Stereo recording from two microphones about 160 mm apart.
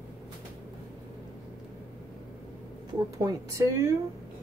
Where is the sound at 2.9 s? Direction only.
20° right (ahead or behind).